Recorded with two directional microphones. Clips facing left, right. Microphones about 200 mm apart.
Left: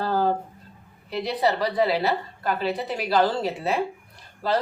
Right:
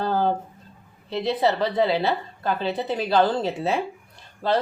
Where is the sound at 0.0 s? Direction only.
20° right (ahead or behind).